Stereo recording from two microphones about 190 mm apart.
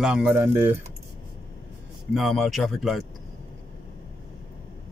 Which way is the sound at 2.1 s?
Centre (ahead or behind).